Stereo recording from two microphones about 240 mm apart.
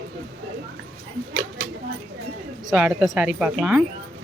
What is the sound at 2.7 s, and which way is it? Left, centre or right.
Speech, centre.